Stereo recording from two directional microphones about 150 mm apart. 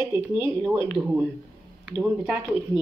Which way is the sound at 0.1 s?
10° right (ahead or behind).